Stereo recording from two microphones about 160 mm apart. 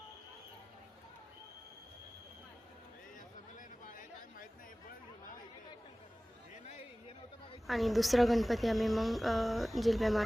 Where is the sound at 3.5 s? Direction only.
55° left (ahead or behind).